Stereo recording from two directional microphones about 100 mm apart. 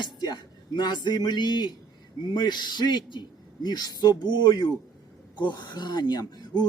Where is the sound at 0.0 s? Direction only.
45° left (ahead or behind).